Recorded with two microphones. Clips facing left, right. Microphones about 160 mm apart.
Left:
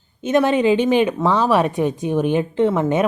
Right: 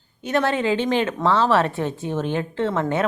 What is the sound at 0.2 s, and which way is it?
Speech, 20° left (ahead or behind).